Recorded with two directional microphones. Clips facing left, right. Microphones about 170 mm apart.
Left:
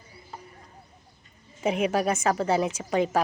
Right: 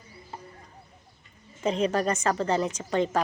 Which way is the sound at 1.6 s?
10° left (ahead or behind).